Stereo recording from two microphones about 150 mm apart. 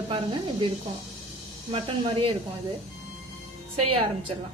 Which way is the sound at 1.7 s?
35° right (ahead or behind).